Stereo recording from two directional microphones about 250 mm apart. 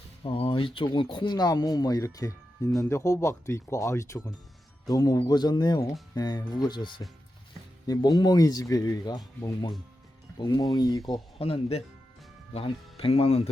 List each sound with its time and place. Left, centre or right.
0.2 s speech: left